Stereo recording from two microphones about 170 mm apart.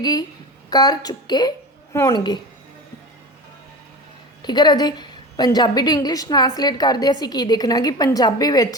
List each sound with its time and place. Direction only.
0.0 s a woman's voice: 20° left (ahead or behind)
4.4 s a woman's voice: 25° left (ahead or behind)